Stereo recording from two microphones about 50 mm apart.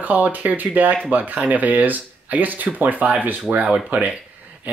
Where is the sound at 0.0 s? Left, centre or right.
Right.